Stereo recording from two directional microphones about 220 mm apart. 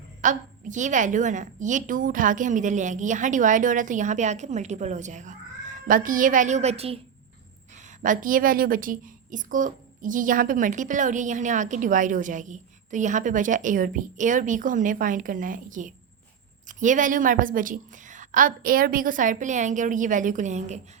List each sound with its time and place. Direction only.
0.2 s speech: 35° right (ahead or behind)
8.0 s speech: 35° right (ahead or behind)